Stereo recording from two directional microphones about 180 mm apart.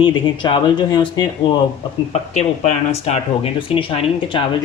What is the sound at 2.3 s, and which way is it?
Speech, 40° left (ahead or behind).